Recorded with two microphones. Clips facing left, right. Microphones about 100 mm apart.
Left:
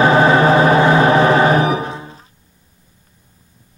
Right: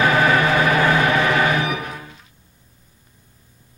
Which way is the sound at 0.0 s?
30° left (ahead or behind).